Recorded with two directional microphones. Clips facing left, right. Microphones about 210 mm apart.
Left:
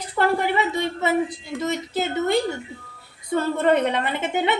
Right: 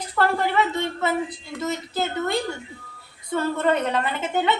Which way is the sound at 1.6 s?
20° left (ahead or behind).